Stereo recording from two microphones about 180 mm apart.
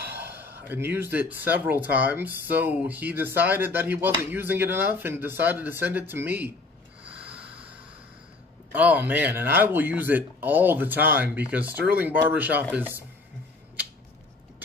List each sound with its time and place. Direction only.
0.2 s speech: 10° right (ahead or behind)
7.1 s snort: 30° right (ahead or behind)
8.7 s speech: 10° right (ahead or behind)